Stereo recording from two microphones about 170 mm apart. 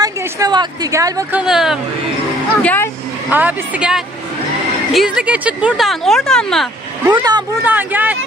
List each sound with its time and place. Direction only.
0.0 s a woman's voice: 20° right (ahead or behind)
1.3 s speech: 5° right (ahead or behind)
2.6 s speech: 10° left (ahead or behind)
3.2 s speech: 10° right (ahead or behind)
7.1 s speech: 25° right (ahead or behind)
7.6 s speech: 10° right (ahead or behind)